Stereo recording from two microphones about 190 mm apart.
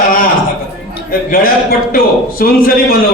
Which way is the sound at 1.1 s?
50° left (ahead or behind).